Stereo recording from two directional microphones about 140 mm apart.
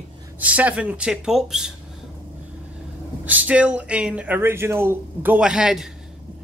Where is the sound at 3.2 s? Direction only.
10° right (ahead or behind).